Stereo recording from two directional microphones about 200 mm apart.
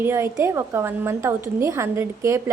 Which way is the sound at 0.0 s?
10° right (ahead or behind).